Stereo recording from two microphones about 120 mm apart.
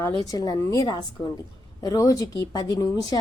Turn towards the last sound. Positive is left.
turn(degrees=30)  # may be behind; listen again after turning